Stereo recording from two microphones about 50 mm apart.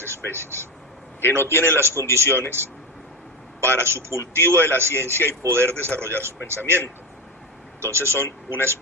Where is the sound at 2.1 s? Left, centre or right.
Right.